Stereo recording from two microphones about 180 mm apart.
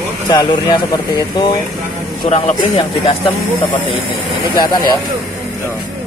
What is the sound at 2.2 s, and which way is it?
Speech, 35° left (ahead or behind).